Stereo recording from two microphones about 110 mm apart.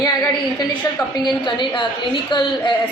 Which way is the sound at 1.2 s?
45° left (ahead or behind).